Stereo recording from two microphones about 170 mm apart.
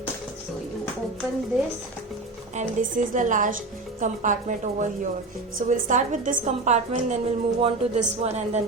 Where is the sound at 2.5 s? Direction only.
50° right (ahead or behind).